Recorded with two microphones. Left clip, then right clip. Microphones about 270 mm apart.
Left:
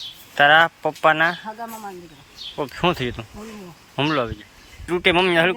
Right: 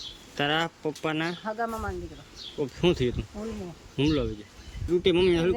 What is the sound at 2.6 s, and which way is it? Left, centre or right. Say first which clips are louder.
A man's voice: left 4 dB; centre.